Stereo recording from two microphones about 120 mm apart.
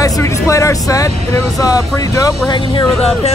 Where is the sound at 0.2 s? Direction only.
25° left (ahead or behind).